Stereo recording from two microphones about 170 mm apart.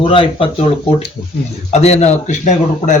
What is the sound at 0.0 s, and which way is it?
Speech, 30° left (ahead or behind).